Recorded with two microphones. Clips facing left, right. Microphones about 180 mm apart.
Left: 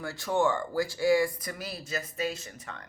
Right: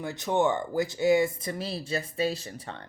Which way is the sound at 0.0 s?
20° right (ahead or behind).